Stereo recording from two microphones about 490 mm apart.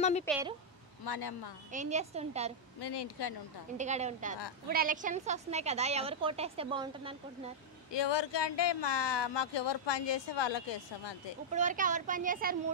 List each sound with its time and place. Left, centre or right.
0.0 s speech: centre
0.3 s speech: centre
1.0 s speech: left
1.7 s a woman's voice: centre
2.8 s speech: left
3.7 s a woman's voice: centre
7.9 s speech: left
11.5 s a woman's voice: centre